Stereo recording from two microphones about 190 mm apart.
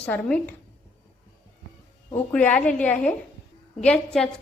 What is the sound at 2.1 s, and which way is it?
A woman's voice, 10° left (ahead or behind).